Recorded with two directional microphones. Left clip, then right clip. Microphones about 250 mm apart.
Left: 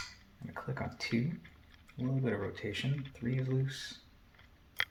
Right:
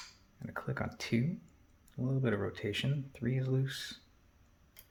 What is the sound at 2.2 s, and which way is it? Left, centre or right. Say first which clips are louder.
Speech: right 2 dB; right.